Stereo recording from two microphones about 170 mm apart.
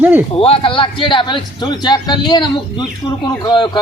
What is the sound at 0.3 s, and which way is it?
A man's voice, 35° left (ahead or behind).